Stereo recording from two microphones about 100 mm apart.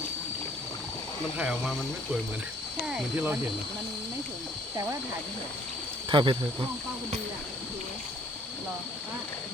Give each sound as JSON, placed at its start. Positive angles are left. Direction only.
{"t": 1.4, "sound": "speech", "side_deg": -5}
{"t": 2.8, "sound": "speech", "side_deg": -5}
{"t": 6.1, "sound": "speech", "side_deg": -55}